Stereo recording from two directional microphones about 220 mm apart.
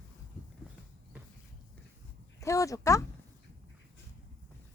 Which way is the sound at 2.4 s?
15° left (ahead or behind).